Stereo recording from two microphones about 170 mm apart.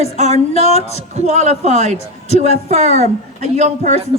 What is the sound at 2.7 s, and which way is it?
Speech, 40° right (ahead or behind).